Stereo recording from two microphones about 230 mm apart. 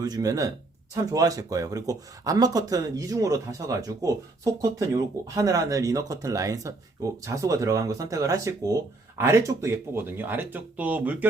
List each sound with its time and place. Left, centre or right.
0.0 s speech: centre